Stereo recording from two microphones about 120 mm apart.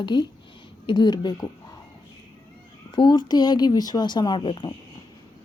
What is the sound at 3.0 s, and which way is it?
Speech, 35° left (ahead or behind).